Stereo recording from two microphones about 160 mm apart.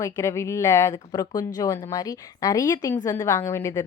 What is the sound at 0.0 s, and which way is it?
A woman's voice, 15° left (ahead or behind).